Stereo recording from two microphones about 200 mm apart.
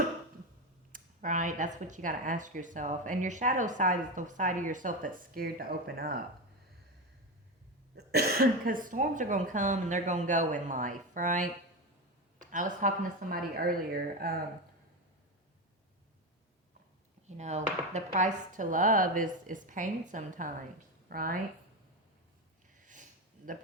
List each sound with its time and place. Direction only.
0.9 s speech: 40° right (ahead or behind)
7.9 s speech: 50° right (ahead or behind)
17.2 s a woman's voice: 35° right (ahead or behind)
22.8 s a sound: 40° right (ahead or behind)